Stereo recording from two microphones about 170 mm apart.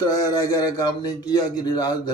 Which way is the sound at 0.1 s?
20° left (ahead or behind).